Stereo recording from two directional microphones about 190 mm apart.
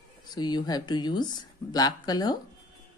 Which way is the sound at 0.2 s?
20° left (ahead or behind).